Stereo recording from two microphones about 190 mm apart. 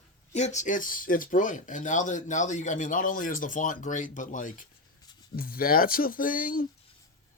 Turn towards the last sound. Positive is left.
turn(degrees=45)  # may be behind; listen again after turning